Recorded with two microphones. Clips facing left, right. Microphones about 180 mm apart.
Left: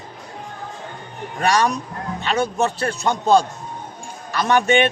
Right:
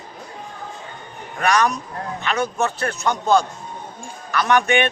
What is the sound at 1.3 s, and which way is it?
A man's voice, 30° left (ahead or behind).